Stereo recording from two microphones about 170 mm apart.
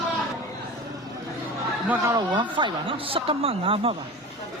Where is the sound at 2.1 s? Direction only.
25° right (ahead or behind).